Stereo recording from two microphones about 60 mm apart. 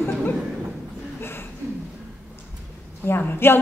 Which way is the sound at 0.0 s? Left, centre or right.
Left.